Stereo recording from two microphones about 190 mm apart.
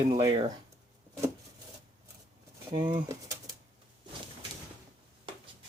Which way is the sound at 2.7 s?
20° right (ahead or behind).